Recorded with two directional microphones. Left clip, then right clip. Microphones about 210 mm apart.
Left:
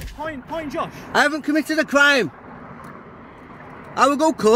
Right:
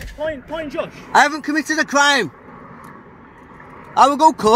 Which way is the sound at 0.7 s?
35° left (ahead or behind).